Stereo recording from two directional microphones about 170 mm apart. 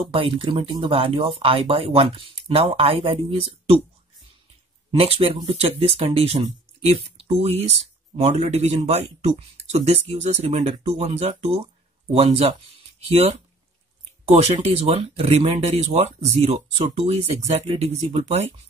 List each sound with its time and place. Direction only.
0.1 s speech: 30° right (ahead or behind)
4.9 s speech: 35° right (ahead or behind)